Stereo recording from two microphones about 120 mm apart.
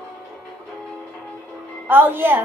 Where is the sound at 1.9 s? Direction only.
15° right (ahead or behind).